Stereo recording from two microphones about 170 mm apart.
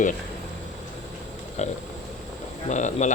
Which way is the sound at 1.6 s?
40° left (ahead or behind).